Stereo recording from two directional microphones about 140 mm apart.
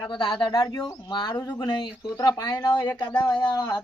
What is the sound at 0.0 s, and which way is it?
Speech, 35° left (ahead or behind).